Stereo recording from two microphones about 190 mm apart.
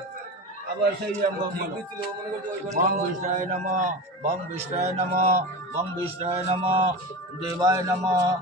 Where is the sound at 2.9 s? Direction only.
40° right (ahead or behind).